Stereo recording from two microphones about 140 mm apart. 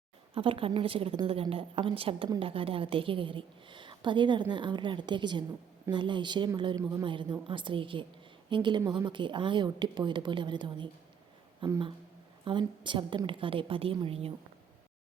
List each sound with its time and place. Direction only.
0.3 s a woman's voice: 40° right (ahead or behind)